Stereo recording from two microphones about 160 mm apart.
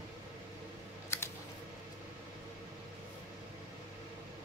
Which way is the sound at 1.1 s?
15° left (ahead or behind).